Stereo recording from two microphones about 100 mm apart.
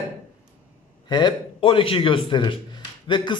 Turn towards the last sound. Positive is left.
turn(degrees=50)  # may be behind; listen again after turning